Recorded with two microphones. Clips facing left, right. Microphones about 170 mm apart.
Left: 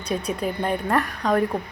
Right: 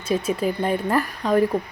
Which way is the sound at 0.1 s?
Centre (ahead or behind).